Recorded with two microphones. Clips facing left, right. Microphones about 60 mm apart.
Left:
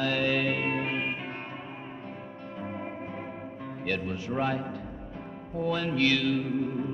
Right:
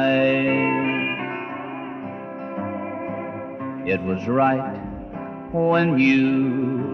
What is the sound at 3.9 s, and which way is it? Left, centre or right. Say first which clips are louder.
Mantra: right 9 dB; right.